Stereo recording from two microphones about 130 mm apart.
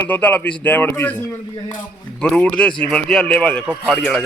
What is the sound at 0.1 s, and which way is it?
Speech, 15° left (ahead or behind).